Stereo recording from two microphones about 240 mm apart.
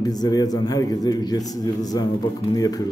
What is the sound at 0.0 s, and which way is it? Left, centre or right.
A man's voice, centre.